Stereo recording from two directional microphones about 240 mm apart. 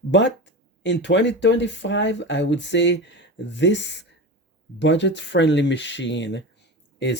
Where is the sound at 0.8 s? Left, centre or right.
Left.